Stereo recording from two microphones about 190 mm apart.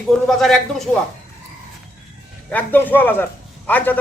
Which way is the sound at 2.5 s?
10° left (ahead or behind).